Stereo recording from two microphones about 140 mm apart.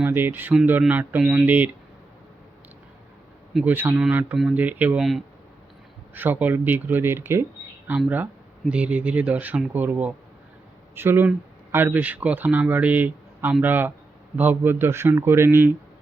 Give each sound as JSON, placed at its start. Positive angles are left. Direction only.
{"t": 0.0, "sound": "speech", "side_deg": -15}
{"t": 3.6, "sound": "speech", "side_deg": -15}
{"t": 6.1, "sound": "speech", "side_deg": -15}